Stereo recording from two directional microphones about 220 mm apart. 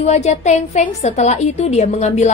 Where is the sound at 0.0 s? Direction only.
30° left (ahead or behind).